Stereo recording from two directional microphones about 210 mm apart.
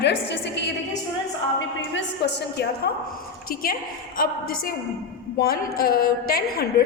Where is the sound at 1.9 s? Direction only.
55° left (ahead or behind).